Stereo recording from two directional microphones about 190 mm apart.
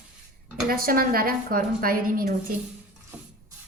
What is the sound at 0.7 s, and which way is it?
Speech, 50° right (ahead or behind).